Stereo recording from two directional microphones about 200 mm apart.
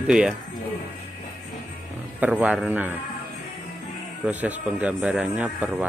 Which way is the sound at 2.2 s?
10° right (ahead or behind).